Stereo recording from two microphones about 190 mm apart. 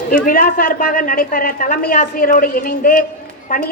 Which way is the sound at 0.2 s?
45° left (ahead or behind).